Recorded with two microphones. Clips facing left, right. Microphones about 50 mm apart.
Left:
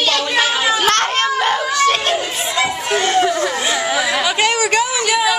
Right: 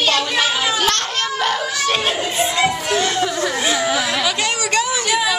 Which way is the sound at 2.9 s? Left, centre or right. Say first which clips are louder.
Left 3 dB; left.